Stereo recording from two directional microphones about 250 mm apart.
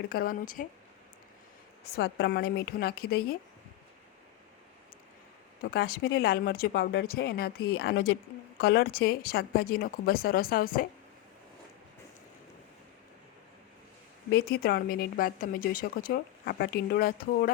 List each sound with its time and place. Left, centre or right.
0.1 s speech: left
2.0 s speech: left
5.7 s speech: left
14.3 s speech: left